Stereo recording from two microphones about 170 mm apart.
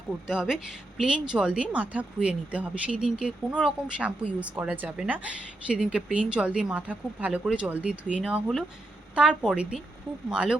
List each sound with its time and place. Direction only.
0.3 s a woman's voice: 5° right (ahead or behind)